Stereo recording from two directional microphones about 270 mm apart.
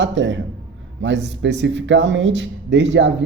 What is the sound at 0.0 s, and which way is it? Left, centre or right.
Speech, right.